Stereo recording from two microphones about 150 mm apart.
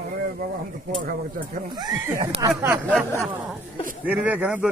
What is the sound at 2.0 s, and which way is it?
Speech, 20° right (ahead or behind).